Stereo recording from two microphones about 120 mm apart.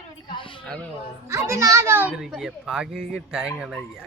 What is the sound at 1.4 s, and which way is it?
Speech, 25° right (ahead or behind).